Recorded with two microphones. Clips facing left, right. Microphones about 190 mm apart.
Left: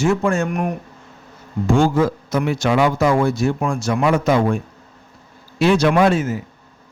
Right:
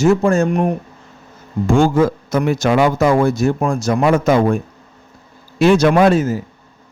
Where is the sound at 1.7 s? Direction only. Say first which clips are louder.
Right 3 dB; 50° right (ahead or behind).